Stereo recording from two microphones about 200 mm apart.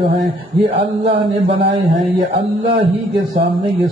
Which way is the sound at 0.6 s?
30° right (ahead or behind).